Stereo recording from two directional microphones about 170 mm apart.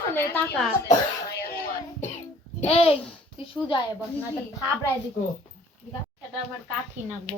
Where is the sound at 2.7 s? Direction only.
35° left (ahead or behind).